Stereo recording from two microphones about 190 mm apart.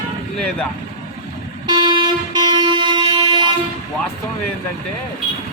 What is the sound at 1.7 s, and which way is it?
Toot, 25° right (ahead or behind).